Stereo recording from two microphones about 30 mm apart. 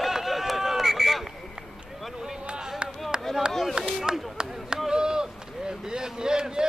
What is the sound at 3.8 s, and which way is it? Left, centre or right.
Chop, right.